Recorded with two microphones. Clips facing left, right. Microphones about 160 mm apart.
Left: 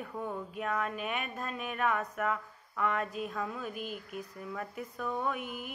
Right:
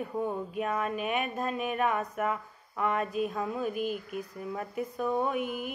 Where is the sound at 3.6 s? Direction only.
10° right (ahead or behind).